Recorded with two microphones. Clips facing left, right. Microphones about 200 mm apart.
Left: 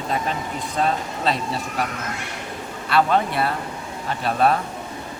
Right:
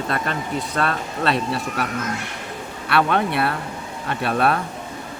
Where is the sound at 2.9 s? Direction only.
65° right (ahead or behind).